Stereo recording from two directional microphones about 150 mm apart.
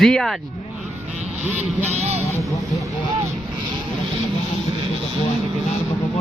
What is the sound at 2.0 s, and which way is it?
Speech, 50° right (ahead or behind).